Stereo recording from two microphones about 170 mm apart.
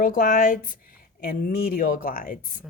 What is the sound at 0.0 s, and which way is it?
Speech, 55° left (ahead or behind).